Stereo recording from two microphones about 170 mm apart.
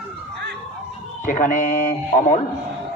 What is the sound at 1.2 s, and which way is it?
Speech, 50° left (ahead or behind).